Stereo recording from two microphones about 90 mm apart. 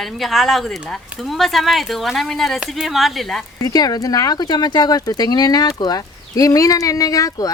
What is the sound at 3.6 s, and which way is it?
Speech, 45° left (ahead or behind).